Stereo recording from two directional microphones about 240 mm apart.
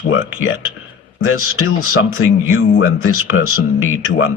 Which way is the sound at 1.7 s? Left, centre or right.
Left.